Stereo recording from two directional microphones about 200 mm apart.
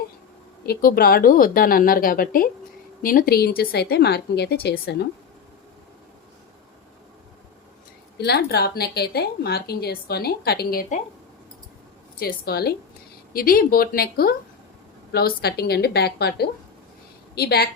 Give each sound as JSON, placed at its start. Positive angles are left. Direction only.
{"t": 0.6, "sound": "a woman's voice", "side_deg": 50}
{"t": 8.2, "sound": "a woman's voice", "side_deg": 55}
{"t": 12.2, "sound": "a woman's voice", "side_deg": 50}